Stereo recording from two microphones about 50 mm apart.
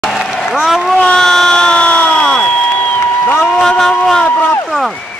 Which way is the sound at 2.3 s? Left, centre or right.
Centre.